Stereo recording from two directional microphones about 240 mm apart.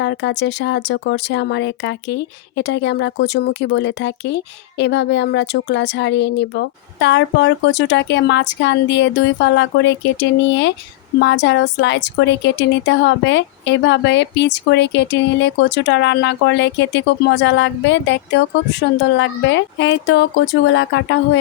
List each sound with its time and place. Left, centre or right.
0.0 s speech: left